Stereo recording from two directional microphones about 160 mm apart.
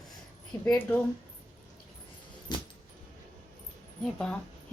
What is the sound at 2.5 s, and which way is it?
Keys jangling, 25° left (ahead or behind).